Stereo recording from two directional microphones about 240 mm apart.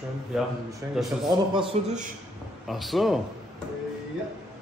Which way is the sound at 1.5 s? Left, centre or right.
Centre.